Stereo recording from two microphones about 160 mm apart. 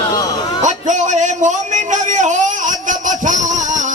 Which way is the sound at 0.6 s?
50° right (ahead or behind).